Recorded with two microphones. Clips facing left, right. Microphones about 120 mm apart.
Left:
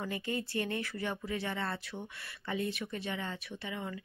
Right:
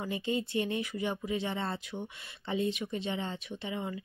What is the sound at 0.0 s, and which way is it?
Speech, 20° right (ahead or behind).